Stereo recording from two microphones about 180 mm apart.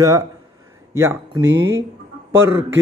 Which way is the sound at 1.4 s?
90° right.